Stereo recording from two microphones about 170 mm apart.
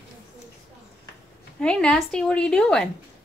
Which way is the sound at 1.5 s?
5° left (ahead or behind).